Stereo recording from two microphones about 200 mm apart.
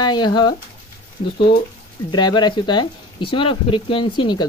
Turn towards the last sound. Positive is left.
turn(degrees=25)  # may be behind; listen again after turning